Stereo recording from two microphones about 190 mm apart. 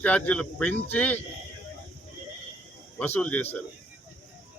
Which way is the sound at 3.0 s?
5° left (ahead or behind).